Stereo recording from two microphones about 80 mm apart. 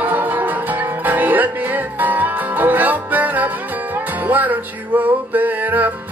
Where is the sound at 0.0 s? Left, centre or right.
Right.